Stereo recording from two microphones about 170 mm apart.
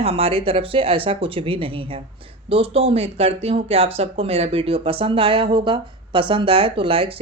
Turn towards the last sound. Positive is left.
turn(degrees=-35)  # may be behind; listen again after turning